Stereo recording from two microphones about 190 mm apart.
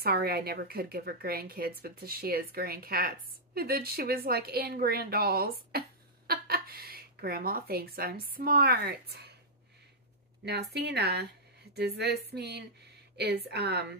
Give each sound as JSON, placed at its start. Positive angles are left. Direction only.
{"t": 0.0, "sound": "a woman's voice", "side_deg": -55}
{"t": 10.4, "sound": "speech", "side_deg": -60}